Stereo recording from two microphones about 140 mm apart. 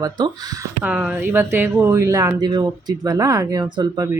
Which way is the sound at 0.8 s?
10° right (ahead or behind).